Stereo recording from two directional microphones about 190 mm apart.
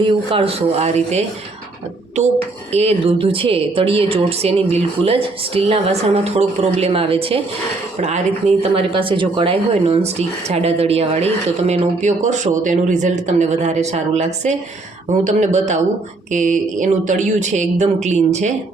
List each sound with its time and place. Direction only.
0.0 s speech: 30° right (ahead or behind)
2.7 s speech: 30° right (ahead or behind)